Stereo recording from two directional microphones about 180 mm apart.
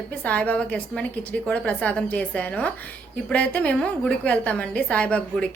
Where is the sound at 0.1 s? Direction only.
10° left (ahead or behind).